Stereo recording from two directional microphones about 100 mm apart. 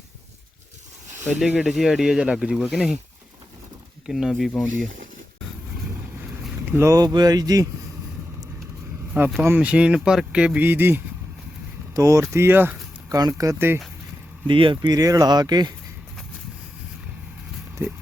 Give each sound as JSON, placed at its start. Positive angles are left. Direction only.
{"t": 1.4, "sound": "speech", "side_deg": -5}
{"t": 4.0, "sound": "speech", "side_deg": -5}
{"t": 6.7, "sound": "speech", "side_deg": -25}
{"t": 6.9, "sound": "speech", "side_deg": -45}
{"t": 9.4, "sound": "speech", "side_deg": -20}
{"t": 11.9, "sound": "speech", "side_deg": -30}
{"t": 13.1, "sound": "speech", "side_deg": -35}
{"t": 14.4, "sound": "speech", "side_deg": -55}
{"t": 14.8, "sound": "speech", "side_deg": -40}